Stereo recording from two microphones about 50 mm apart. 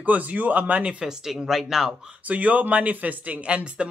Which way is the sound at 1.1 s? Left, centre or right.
Centre.